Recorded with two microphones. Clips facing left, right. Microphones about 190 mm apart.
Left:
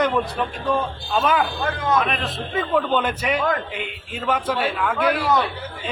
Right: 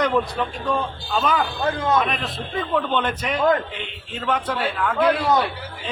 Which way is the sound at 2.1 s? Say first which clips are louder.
Left 1 dB; centre (ahead or behind).